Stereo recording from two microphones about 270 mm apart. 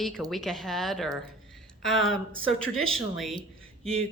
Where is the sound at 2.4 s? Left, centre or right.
Left.